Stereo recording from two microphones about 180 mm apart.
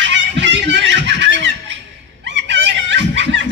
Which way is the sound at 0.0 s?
85° right.